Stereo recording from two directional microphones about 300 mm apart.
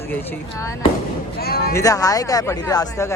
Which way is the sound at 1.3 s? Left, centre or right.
Left.